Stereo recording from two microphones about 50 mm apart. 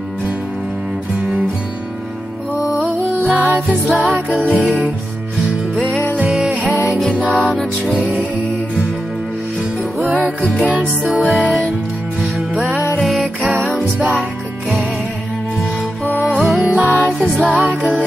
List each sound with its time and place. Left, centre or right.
3.3 s music: right
9.9 s music: right
16.3 s music: right